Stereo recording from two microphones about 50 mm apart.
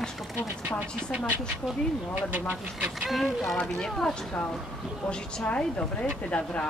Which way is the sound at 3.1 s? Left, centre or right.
Centre.